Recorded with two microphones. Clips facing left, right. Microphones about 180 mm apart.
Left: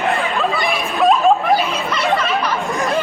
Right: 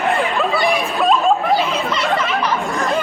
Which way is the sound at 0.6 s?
Centre (ahead or behind).